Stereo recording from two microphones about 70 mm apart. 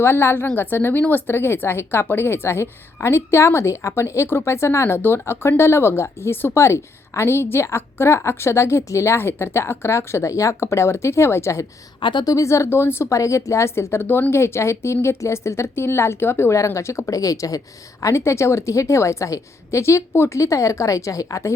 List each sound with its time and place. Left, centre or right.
0.0 s a woman's voice: left
12.1 s a woman's voice: left
14.3 s a woman's voice: left
18.0 s a woman's voice: left